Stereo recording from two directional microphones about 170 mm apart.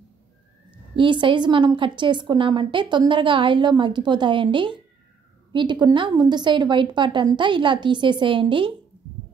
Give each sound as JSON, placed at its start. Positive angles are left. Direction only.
{"t": 0.9, "sound": "a woman's voice", "side_deg": -30}